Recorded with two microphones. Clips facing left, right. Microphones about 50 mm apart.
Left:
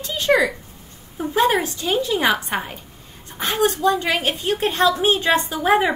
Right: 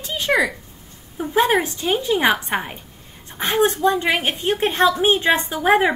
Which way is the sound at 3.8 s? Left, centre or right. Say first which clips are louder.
Right 1 dB; right.